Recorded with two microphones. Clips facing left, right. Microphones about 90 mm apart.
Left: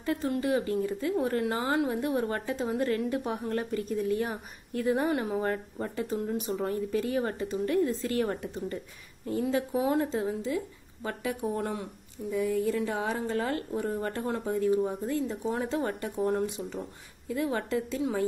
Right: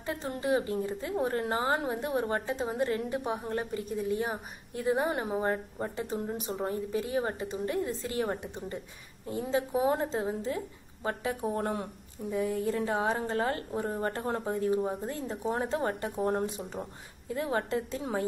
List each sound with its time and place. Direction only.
0.0 s a woman's voice: 25° right (ahead or behind)